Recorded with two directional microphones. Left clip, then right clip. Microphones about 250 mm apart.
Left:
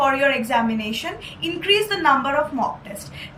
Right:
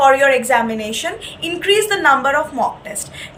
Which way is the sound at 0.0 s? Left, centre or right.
Centre.